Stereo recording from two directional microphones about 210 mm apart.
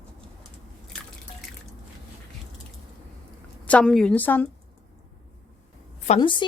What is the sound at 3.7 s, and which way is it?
Speech, 5° left (ahead or behind).